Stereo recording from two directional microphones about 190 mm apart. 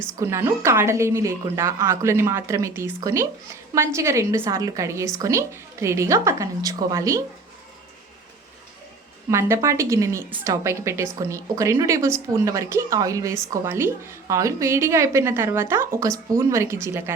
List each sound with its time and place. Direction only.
0.2 s speech: 15° right (ahead or behind)
9.3 s speech: 15° right (ahead or behind)